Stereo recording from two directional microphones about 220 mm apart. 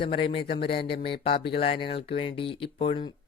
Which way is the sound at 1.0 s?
25° left (ahead or behind).